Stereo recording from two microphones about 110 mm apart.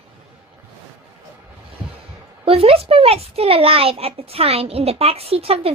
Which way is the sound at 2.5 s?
60° right (ahead or behind).